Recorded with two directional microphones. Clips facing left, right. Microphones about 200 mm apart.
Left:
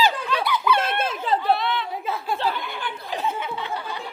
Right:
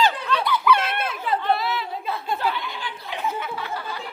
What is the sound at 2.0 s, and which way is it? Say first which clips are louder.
Speech: even; 10° left (ahead or behind).